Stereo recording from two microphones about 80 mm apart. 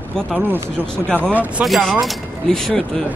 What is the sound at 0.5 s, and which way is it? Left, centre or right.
Speech, right.